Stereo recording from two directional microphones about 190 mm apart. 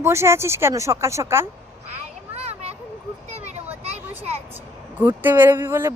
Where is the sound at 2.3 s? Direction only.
35° right (ahead or behind).